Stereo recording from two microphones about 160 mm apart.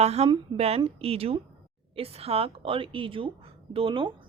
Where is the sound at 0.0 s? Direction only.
40° right (ahead or behind).